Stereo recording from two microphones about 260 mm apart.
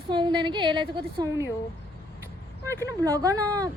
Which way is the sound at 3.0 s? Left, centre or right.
Centre.